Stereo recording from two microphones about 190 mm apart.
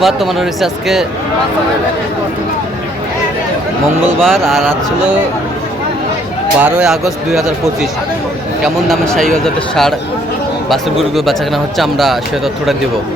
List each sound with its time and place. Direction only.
0.0 s a man's voice: centre (ahead or behind)
4.2 s a man's voice: centre (ahead or behind)
6.6 s a man's voice: 5° right (ahead or behind)
11.1 s a man's voice: centre (ahead or behind)